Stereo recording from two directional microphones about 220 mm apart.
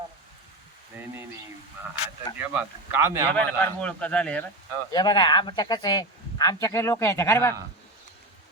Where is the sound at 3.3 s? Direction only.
5° left (ahead or behind).